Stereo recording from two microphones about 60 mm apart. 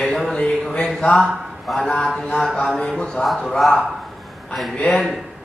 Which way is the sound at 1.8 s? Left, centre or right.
Centre.